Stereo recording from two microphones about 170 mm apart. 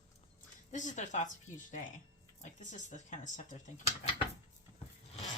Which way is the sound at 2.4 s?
45° left (ahead or behind).